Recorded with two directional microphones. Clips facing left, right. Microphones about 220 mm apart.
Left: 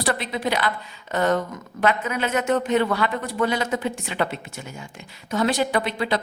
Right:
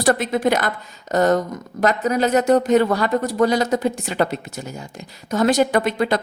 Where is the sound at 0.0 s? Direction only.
45° right (ahead or behind).